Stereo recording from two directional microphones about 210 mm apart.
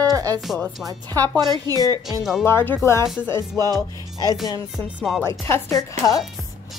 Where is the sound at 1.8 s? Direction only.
15° left (ahead or behind).